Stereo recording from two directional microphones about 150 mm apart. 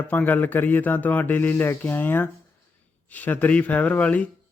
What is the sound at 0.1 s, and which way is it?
A man's voice, 10° left (ahead or behind).